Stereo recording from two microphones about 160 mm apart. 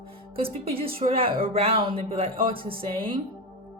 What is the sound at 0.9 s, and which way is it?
A woman's voice, 35° right (ahead or behind).